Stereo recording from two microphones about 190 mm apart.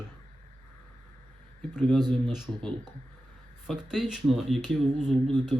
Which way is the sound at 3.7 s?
5° right (ahead or behind).